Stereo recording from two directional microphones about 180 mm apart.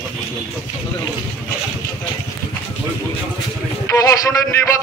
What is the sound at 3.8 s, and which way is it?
Speech, 20° left (ahead or behind).